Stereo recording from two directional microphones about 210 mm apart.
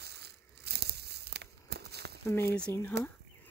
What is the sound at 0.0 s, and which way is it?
Tearing, 50° right (ahead or behind).